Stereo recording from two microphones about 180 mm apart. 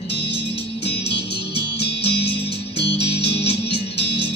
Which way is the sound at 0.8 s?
35° left (ahead or behind).